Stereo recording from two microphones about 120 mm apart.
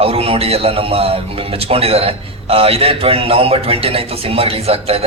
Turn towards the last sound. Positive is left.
turn(degrees=-55)  # may be behind; listen again after turning